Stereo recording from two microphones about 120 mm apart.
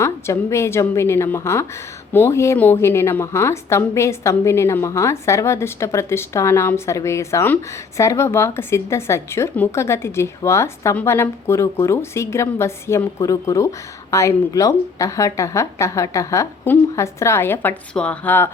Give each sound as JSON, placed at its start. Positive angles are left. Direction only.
{"t": 0.0, "sound": "a woman's voice", "side_deg": 25}